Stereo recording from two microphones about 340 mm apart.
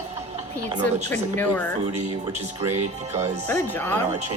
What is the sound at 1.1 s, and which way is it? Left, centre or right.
Speech, centre.